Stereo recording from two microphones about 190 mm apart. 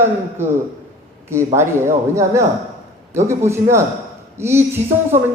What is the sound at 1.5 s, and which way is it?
Speech, 15° right (ahead or behind).